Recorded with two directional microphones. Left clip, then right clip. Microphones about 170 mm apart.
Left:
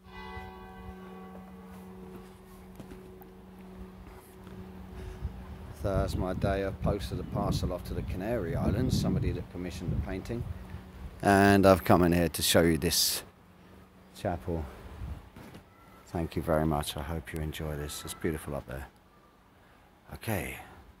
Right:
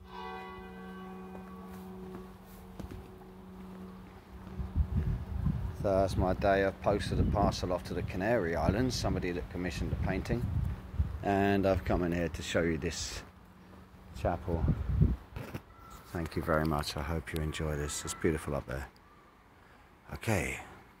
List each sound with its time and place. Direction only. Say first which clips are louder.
5.9 s speech: right 3 dB; centre (ahead or behind)
11.2 s speech: left 7 dB; 65° left (ahead or behind); by 13.3 s 50° left (ahead or behind)
14.1 s speech: even; 35° left (ahead or behind)
16.1 s speech: left 2 dB; 20° left (ahead or behind); by 18.9 s centre (ahead or behind)
20.1 s speech: right 2 dB; centre (ahead or behind)